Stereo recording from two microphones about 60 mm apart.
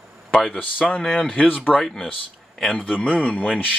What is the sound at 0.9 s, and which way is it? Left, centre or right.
Speech, centre.